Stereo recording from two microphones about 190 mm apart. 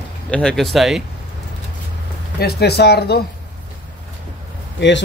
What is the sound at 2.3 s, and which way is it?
Speech, 55° left (ahead or behind).